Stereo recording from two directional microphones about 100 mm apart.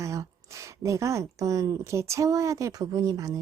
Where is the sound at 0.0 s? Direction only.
30° right (ahead or behind).